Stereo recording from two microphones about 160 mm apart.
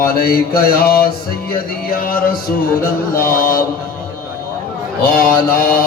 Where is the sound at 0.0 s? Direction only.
70° left (ahead or behind).